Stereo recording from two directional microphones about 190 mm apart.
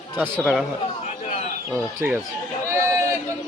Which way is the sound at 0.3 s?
10° left (ahead or behind).